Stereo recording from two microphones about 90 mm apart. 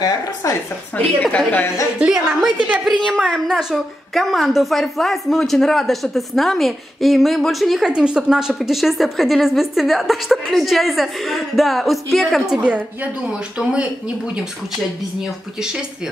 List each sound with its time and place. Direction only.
0.4 s speech: 35° left (ahead or behind)
0.9 s a woman's voice: 15° left (ahead or behind)
2.0 s a woman's voice: 5° right (ahead or behind)
12.5 s speech: 15° right (ahead or behind)